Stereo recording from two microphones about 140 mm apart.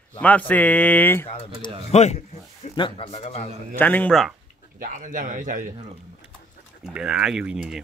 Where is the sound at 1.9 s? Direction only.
55° left (ahead or behind).